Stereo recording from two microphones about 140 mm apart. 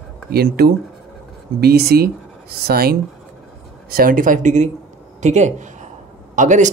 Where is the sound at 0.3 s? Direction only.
90° right.